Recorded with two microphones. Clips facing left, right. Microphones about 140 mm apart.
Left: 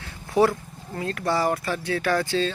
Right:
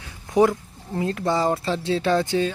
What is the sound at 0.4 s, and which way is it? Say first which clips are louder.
Speech: right 2 dB; 20° right (ahead or behind).